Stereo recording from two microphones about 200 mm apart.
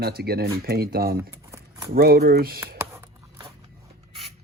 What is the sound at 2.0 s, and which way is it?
Speech, 50° right (ahead or behind).